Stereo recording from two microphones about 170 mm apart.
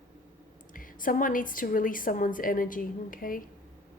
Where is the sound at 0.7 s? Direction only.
55° left (ahead or behind).